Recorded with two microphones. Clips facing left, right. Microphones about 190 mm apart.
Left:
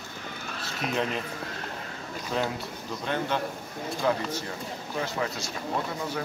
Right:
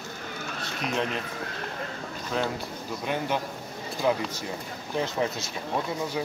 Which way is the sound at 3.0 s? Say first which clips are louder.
Even; 10° right (ahead or behind).